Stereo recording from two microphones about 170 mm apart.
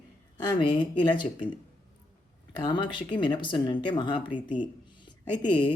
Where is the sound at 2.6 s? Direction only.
25° left (ahead or behind).